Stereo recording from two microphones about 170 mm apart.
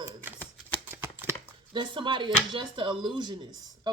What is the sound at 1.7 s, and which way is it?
Speech, 25° right (ahead or behind).